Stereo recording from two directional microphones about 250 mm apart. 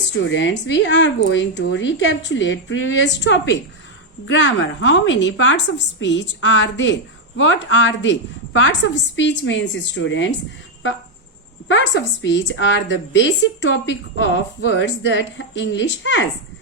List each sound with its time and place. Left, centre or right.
0.3 s a woman's voice: left
11.7 s a woman's voice: left